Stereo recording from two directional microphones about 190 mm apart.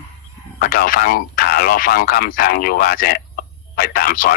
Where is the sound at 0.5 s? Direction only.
50° left (ahead or behind).